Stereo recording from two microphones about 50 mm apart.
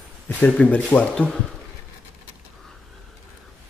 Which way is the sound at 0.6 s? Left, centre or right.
Left.